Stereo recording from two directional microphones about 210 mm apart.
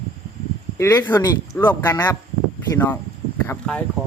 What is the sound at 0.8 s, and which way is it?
Speech, 10° left (ahead or behind).